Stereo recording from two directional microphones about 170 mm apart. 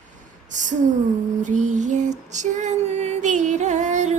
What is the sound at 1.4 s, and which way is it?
Female singing, 45° right (ahead or behind).